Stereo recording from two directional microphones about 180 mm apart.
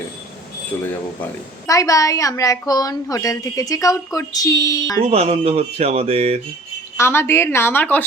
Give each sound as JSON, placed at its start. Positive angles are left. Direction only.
{"t": 0.9, "sound": "a woman's voice", "side_deg": 15}
{"t": 5.0, "sound": "speech", "side_deg": -35}
{"t": 6.9, "sound": "a woman's voice", "side_deg": 15}